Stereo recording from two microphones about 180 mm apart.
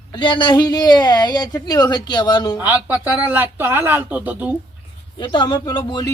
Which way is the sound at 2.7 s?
10° right (ahead or behind).